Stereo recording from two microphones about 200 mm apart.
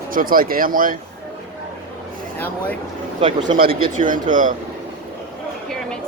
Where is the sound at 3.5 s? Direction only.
45° right (ahead or behind).